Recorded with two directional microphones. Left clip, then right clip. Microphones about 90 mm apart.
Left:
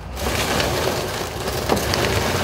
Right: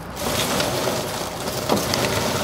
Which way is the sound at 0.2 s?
15° left (ahead or behind).